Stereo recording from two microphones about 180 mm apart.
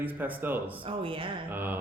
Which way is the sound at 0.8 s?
30° right (ahead or behind).